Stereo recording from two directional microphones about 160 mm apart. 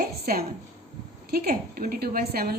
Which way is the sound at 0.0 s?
70° right (ahead or behind).